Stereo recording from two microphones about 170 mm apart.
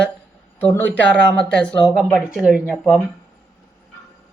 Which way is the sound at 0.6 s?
10° left (ahead or behind).